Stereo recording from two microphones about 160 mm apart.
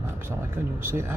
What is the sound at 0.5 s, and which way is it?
Speech, 15° right (ahead or behind).